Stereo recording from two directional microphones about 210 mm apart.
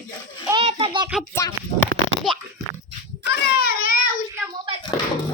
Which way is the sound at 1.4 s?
20° left (ahead or behind).